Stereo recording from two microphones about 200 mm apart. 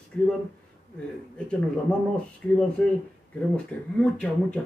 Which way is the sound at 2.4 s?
5° left (ahead or behind).